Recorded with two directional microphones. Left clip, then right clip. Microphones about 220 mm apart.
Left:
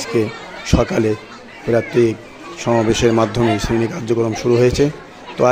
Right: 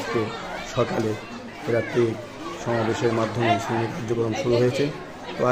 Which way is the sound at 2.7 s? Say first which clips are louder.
Left 9 dB; 45° left (ahead or behind).